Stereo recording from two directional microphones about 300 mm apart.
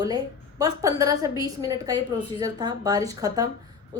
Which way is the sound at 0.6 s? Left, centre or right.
Centre.